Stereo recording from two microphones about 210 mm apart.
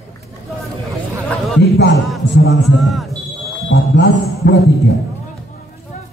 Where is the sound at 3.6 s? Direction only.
55° left (ahead or behind).